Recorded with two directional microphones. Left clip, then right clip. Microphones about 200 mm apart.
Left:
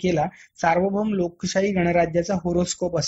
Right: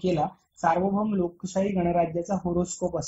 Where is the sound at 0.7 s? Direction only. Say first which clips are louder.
Left 4 dB; 35° left (ahead or behind).